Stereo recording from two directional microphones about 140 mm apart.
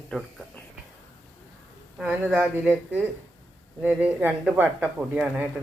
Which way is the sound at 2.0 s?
5° right (ahead or behind).